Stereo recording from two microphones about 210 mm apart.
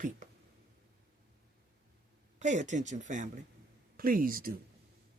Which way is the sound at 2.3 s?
35° right (ahead or behind).